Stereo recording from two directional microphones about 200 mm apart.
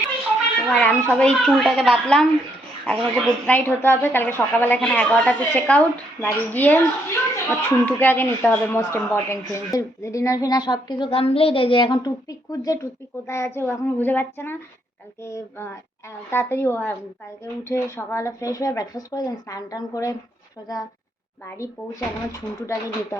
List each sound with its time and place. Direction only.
0.7 s a woman's voice: 5° left (ahead or behind)
21.4 s a child's voice: 15° left (ahead or behind)